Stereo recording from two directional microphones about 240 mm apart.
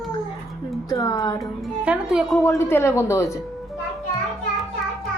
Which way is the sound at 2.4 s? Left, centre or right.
Centre.